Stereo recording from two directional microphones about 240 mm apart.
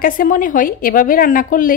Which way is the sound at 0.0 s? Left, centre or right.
Left.